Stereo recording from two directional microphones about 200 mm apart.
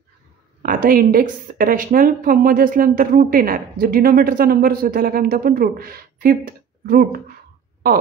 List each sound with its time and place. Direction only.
0.6 s a woman's voice: 45° right (ahead or behind)